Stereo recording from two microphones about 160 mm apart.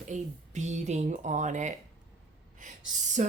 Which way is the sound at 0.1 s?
45° right (ahead or behind).